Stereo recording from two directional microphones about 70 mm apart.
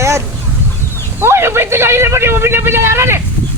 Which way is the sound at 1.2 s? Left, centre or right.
Right.